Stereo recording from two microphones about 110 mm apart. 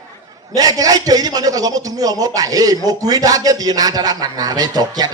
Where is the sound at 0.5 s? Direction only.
35° right (ahead or behind).